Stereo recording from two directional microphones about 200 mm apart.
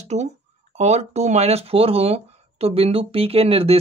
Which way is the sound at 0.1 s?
35° right (ahead or behind).